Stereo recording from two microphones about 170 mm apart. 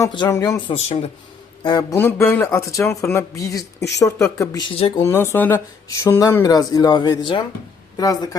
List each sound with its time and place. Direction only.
0.1 s speech: 25° left (ahead or behind)
0.7 s speech: 40° left (ahead or behind)
1.6 s speech: 25° left (ahead or behind)
2.0 s speech: 15° left (ahead or behind)